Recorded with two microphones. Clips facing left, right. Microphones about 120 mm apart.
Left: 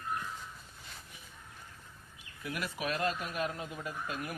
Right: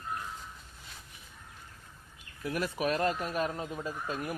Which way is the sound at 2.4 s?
35° right (ahead or behind).